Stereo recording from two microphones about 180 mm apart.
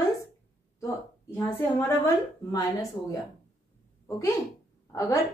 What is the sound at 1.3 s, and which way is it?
Speech, 15° left (ahead or behind).